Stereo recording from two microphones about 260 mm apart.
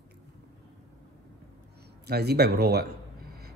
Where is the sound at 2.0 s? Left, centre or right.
Right.